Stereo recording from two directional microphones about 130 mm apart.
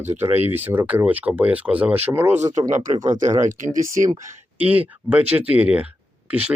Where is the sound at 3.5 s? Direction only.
80° right.